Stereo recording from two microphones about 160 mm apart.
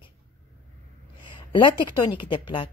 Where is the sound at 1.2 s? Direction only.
30° left (ahead or behind).